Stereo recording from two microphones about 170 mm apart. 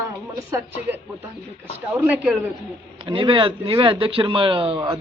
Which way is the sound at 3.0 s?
30° right (ahead or behind).